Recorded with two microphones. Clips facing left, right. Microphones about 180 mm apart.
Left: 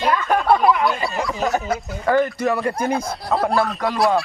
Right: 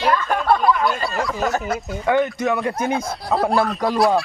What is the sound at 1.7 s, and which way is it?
A child's voice, centre (ahead or behind).